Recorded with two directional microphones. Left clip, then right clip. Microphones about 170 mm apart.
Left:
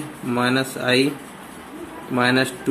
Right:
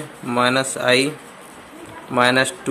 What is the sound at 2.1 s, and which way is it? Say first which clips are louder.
Speech: right 3 dB; 35° right (ahead or behind).